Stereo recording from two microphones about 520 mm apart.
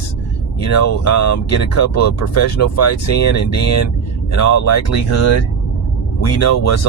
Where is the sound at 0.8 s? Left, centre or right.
Left.